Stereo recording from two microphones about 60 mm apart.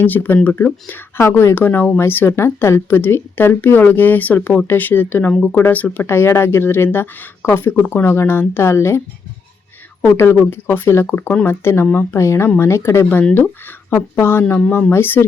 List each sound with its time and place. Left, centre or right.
0.0 s speech: left
1.2 s speech: left
1.5 s speech: left
10.2 s speech: left